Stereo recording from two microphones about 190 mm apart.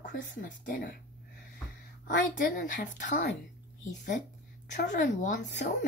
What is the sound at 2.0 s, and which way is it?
A woman's voice, 45° left (ahead or behind).